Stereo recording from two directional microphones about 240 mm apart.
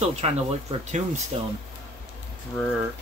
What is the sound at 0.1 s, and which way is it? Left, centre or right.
Speech, right.